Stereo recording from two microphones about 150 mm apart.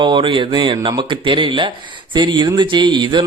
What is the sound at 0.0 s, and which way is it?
Speech, 35° right (ahead or behind).